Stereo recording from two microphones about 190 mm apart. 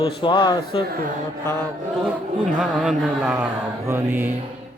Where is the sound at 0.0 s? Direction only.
25° left (ahead or behind).